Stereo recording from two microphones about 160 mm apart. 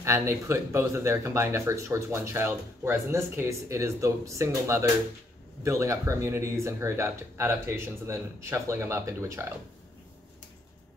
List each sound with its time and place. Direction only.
0.0 s speech: 20° right (ahead or behind)